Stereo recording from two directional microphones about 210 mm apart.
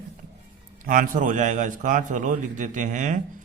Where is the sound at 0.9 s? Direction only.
40° right (ahead or behind).